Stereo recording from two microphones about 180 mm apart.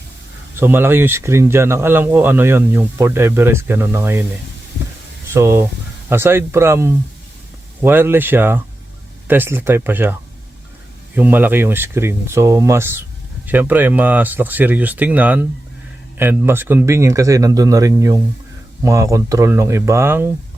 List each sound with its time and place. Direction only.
0.6 s speech: 10° right (ahead or behind)
5.3 s speech: 15° right (ahead or behind)